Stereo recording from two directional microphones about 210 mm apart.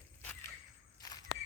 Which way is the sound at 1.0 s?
20° left (ahead or behind).